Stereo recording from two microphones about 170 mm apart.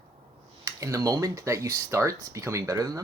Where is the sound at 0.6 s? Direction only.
20° right (ahead or behind).